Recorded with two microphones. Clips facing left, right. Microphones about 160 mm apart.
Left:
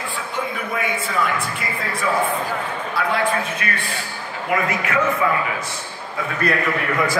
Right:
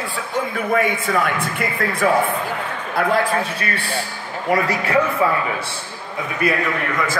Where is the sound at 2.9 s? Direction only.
40° right (ahead or behind).